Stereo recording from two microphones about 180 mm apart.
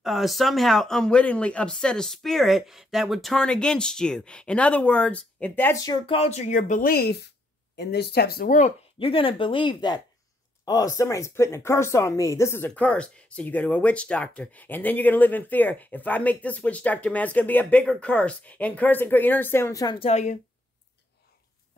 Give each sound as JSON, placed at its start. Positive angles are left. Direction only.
{"t": 0.0, "sound": "speech", "side_deg": 0}
{"t": 6.0, "sound": "speech", "side_deg": 35}
{"t": 7.7, "sound": "speech", "side_deg": 70}
{"t": 9.0, "sound": "speech", "side_deg": 30}
{"t": 20.0, "sound": "a woman's voice", "side_deg": 40}